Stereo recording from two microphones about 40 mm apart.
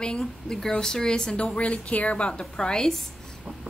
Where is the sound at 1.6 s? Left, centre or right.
Left; by 2.9 s centre.